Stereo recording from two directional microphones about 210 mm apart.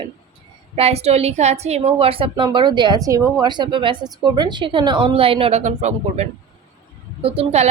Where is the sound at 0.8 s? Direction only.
30° right (ahead or behind).